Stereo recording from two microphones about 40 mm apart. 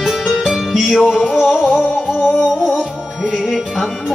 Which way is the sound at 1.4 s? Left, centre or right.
Left.